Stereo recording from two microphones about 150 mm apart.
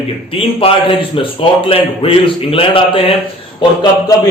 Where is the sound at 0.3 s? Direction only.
35° left (ahead or behind).